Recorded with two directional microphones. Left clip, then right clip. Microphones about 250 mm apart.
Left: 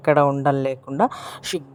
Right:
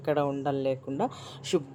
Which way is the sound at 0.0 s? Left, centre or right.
Left.